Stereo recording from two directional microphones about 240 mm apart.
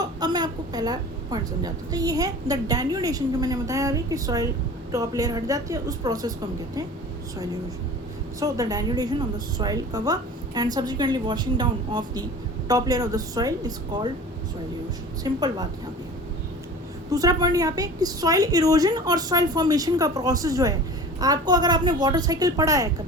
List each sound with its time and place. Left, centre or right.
0.0 s a woman's voice: centre
8.4 s a woman's voice: centre
15.2 s a woman's voice: centre
17.1 s a woman's voice: centre